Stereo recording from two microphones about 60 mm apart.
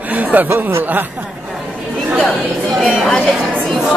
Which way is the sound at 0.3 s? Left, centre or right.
Right.